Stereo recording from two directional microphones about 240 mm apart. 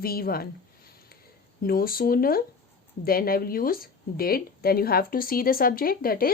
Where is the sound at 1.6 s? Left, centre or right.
Left.